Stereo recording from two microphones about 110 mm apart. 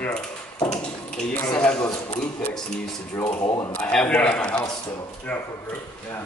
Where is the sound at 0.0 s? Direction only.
10° left (ahead or behind).